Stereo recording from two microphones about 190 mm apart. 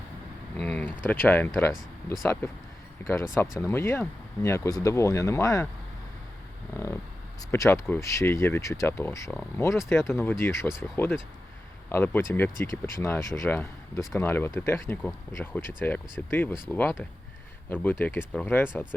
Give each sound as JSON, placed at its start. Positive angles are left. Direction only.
{"t": 0.5, "sound": "a sound", "side_deg": 5}
{"t": 1.0, "sound": "speech", "side_deg": 10}
{"t": 6.7, "sound": "speech", "side_deg": 15}